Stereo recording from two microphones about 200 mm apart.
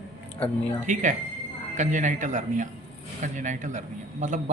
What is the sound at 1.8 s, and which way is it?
Speech, 40° right (ahead or behind).